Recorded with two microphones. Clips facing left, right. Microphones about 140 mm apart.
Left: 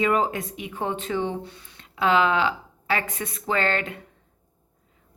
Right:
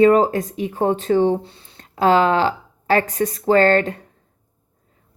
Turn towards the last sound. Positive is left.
turn(degrees=-40)  # may be behind; listen again after turning